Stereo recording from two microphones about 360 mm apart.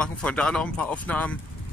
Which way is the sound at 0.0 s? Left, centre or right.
Centre.